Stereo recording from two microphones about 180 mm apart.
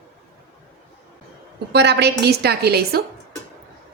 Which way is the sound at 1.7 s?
70° right (ahead or behind).